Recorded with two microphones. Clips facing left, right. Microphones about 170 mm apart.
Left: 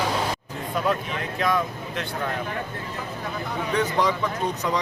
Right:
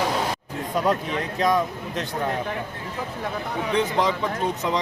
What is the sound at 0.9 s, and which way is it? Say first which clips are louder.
Speech: right 2 dB; 35° right (ahead or behind).